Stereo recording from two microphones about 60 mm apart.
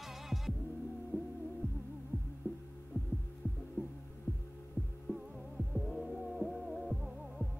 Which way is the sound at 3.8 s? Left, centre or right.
Right.